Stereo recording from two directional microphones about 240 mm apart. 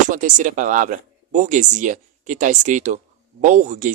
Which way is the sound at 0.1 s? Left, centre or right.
Right.